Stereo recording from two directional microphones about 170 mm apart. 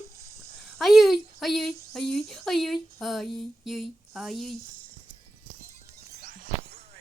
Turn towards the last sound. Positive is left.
turn(degrees=-55)  # may be behind; listen again after turning